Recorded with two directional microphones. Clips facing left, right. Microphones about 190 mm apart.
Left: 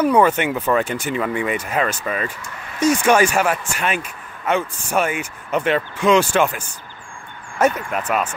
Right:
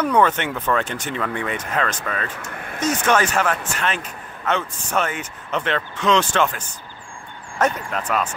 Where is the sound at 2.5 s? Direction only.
55° right (ahead or behind).